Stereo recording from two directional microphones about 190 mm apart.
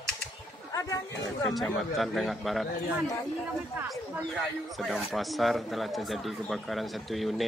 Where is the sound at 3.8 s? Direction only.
Centre (ahead or behind).